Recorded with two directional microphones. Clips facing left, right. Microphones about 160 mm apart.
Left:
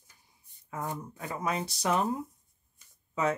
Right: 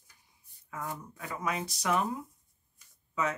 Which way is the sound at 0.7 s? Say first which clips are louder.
Left 3 dB; 20° left (ahead or behind).